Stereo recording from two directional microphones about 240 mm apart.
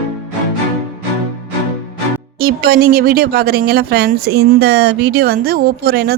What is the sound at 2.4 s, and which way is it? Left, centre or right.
Speech, right.